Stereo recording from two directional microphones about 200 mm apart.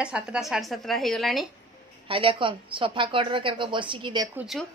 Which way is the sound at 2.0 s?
25° right (ahead or behind).